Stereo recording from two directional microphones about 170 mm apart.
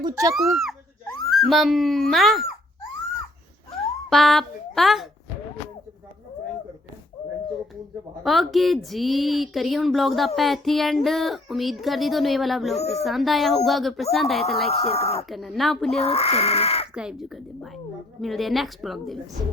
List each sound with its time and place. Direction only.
0.0 s speech: 20° right (ahead or behind)
0.3 s speech: centre (ahead or behind)
4.1 s a woman's voice: centre (ahead or behind)
8.2 s a woman's voice: centre (ahead or behind)
14.7 s speech: 35° left (ahead or behind)
15.3 s a woman's voice: centre (ahead or behind)
16.0 s speech: 35° left (ahead or behind)
16.9 s a woman's voice: 5° right (ahead or behind)